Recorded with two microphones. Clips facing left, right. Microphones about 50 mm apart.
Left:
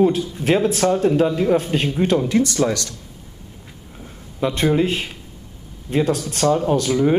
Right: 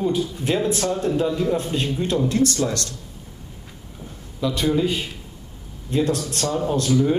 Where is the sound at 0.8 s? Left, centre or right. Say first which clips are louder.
Left 5 dB; left.